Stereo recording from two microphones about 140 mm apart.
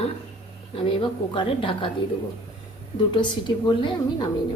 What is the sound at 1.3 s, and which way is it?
Speech, 35° left (ahead or behind).